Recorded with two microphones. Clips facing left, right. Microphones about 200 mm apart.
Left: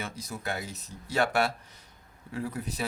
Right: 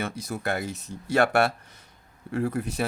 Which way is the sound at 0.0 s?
55° right (ahead or behind).